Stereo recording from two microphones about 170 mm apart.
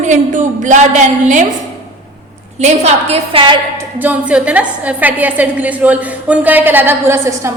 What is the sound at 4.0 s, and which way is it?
A woman's voice, 10° right (ahead or behind).